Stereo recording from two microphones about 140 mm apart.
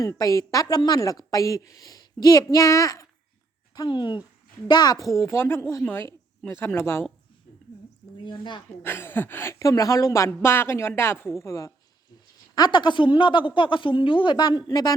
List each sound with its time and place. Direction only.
0.0 s a woman's voice: 25° left (ahead or behind)
8.2 s speech: 35° left (ahead or behind)
8.8 s a woman's voice: 15° left (ahead or behind)